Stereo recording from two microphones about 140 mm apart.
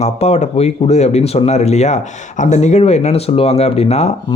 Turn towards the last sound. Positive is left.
turn(degrees=50)  # may be behind; listen again after turning